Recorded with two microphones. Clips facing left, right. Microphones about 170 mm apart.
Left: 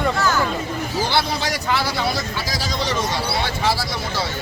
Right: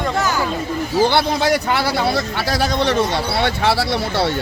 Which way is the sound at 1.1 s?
55° right (ahead or behind).